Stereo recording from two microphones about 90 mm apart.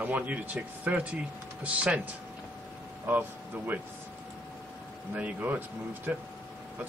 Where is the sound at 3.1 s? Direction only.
20° right (ahead or behind).